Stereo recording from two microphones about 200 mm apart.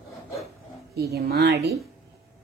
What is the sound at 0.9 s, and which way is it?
Speech, 55° right (ahead or behind).